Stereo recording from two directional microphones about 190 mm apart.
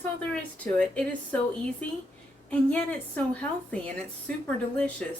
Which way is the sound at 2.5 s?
5° left (ahead or behind).